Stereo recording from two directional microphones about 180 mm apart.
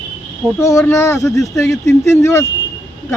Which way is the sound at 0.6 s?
15° left (ahead or behind).